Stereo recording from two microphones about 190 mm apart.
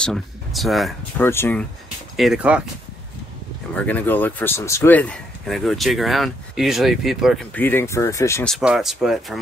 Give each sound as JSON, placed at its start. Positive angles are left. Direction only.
{"t": 0.0, "sound": "speech", "side_deg": 0}
{"t": 1.2, "sound": "speech", "side_deg": 10}
{"t": 2.1, "sound": "speech", "side_deg": -5}
{"t": 3.7, "sound": "speech", "side_deg": 10}
{"t": 7.5, "sound": "speech", "side_deg": 10}
{"t": 8.5, "sound": "speech", "side_deg": 0}